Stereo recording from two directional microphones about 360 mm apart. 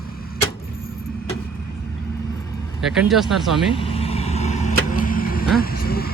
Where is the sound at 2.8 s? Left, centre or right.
Centre.